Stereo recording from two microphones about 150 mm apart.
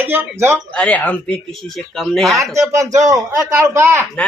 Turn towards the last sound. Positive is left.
turn(degrees=-15)  # may be behind; listen again after turning